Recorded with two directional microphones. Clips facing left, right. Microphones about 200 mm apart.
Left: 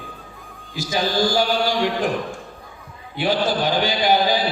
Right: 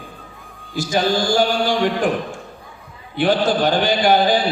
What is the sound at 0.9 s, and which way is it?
Speech, 50° right (ahead or behind).